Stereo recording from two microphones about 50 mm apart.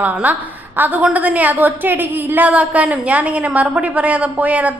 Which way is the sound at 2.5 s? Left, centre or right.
Right.